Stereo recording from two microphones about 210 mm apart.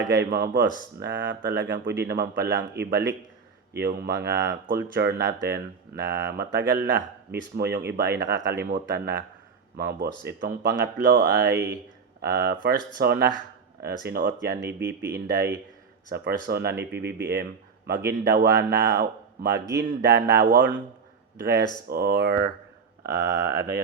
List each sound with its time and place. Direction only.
0.1 s speech: 50° right (ahead or behind)
14.6 s speech: 10° right (ahead or behind)
14.8 s speech: 50° right (ahead or behind)
21.8 s speech: 50° right (ahead or behind)